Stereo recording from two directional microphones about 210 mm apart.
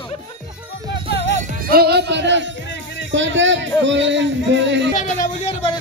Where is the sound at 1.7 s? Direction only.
50° right (ahead or behind).